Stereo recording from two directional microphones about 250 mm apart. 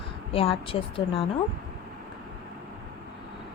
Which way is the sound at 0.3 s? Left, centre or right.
Left.